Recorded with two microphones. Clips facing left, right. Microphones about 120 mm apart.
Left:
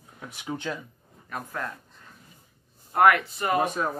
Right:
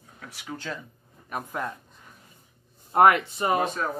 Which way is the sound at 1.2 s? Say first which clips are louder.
Right 2 dB; 15° right (ahead or behind).